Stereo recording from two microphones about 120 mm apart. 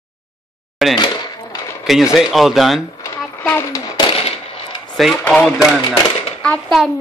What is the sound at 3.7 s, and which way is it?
Speech, 35° left (ahead or behind).